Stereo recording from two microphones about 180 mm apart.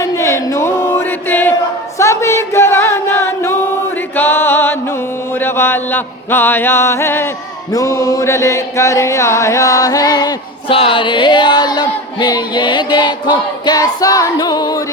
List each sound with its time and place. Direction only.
0.0 s chant: 15° left (ahead or behind)
2.0 s singing: 15° left (ahead or behind)
4.2 s chant: 10° left (ahead or behind)
5.4 s music: 10° left (ahead or behind)
7.7 s chant: 20° left (ahead or behind)